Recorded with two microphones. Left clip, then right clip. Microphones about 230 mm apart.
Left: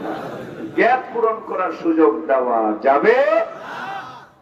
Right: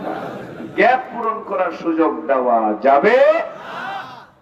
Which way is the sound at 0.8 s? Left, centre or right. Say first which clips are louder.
Right 1 dB; right.